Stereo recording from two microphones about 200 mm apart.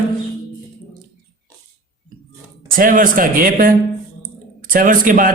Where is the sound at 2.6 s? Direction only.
45° right (ahead or behind).